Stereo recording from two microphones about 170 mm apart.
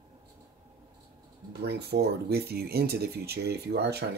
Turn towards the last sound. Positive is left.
turn(degrees=-75)  # may be behind; listen again after turning